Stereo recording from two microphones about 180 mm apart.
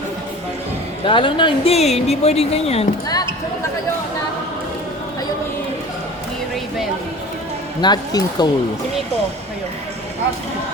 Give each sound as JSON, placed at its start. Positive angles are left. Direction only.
{"t": 1.0, "sound": "speech", "side_deg": 30}
{"t": 7.8, "sound": "speech", "side_deg": 20}